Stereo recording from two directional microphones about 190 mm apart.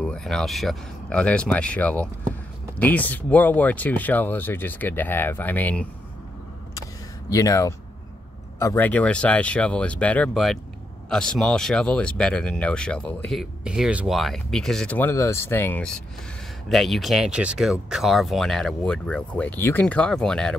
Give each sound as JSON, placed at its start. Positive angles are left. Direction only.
{"t": 0.0, "sound": "speech", "side_deg": 5}
{"t": 7.2, "sound": "speech", "side_deg": 20}